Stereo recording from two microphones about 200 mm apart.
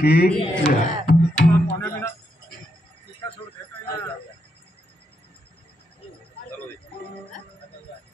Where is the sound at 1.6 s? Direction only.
10° left (ahead or behind).